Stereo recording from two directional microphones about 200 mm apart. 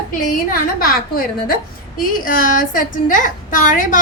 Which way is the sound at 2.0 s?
45° left (ahead or behind).